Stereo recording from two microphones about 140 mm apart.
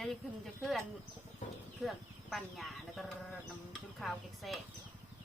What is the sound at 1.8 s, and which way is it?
A woman's voice, centre (ahead or behind).